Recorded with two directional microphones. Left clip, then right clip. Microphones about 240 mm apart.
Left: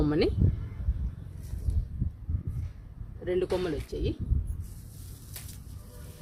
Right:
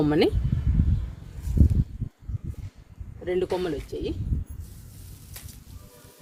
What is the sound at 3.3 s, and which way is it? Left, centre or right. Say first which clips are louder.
Speech: right 3 dB; right.